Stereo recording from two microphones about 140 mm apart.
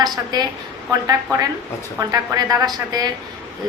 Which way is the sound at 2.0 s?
25° right (ahead or behind).